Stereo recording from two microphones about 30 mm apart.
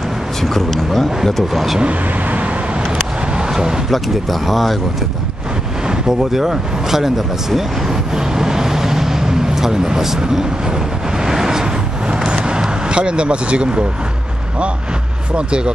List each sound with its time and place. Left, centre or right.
0.4 s speech: centre
1.5 s speech: centre
1.9 s speech: right
3.3 s vehicle: right
3.9 s speech: centre
6.0 s speech: centre
11.1 s vehicle: centre
12.3 s a sound: right
15.3 s speech: right